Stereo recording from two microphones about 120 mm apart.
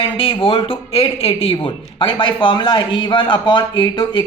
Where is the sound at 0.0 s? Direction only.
50° left (ahead or behind).